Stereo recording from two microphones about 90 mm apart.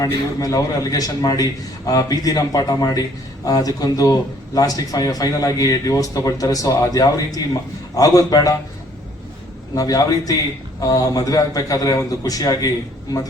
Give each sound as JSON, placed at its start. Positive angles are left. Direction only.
{"t": 0.0, "sound": "a man's voice", "side_deg": 40}
{"t": 9.7, "sound": "a man's voice", "side_deg": 45}